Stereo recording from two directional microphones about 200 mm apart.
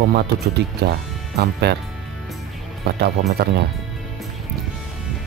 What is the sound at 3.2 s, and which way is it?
Speech, 40° right (ahead or behind).